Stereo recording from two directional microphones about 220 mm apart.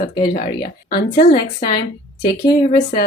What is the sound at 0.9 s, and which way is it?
Speech, 35° left (ahead or behind).